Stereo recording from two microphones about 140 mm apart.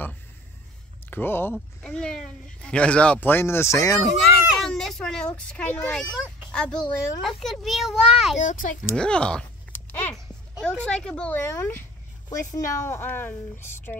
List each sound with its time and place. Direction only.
1.1 s a child's voice: 15° left (ahead or behind)
4.5 s children playing: centre (ahead or behind)
5.9 s a child's voice: 5° left (ahead or behind)
8.4 s a child's voice: 65° left (ahead or behind)
8.9 s a sound: 5° left (ahead or behind)
10.1 s speech: 5° left (ahead or behind)